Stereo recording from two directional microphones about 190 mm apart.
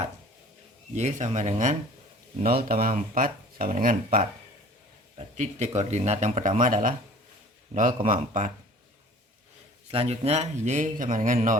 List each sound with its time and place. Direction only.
0.9 s speech: 35° right (ahead or behind)
2.4 s speech: 50° right (ahead or behind)
5.1 s speech: 35° right (ahead or behind)
9.9 s speech: 30° right (ahead or behind)